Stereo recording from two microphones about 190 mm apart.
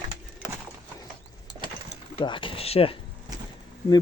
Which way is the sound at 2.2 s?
25° left (ahead or behind).